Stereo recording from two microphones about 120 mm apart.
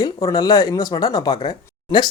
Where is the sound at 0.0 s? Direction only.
35° left (ahead or behind).